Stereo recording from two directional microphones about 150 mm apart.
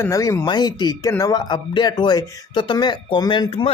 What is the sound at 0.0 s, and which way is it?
Speech, 20° left (ahead or behind).